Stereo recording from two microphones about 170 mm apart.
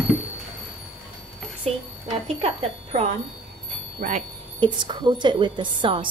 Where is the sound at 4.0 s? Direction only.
55° right (ahead or behind).